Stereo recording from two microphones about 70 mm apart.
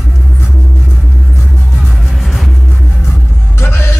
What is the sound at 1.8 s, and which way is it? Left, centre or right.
Music, centre.